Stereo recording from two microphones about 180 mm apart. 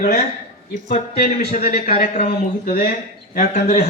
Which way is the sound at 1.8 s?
55° left (ahead or behind).